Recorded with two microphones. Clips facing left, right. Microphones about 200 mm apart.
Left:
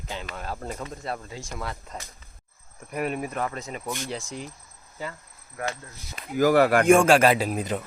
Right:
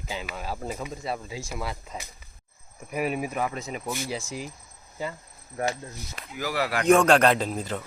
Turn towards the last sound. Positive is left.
turn(degrees=15)  # may be behind; listen again after turning